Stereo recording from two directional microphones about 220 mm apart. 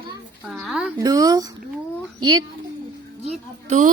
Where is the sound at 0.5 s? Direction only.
Centre (ahead or behind).